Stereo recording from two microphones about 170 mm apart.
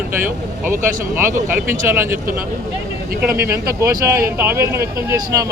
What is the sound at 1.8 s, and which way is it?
Speech, 15° right (ahead or behind).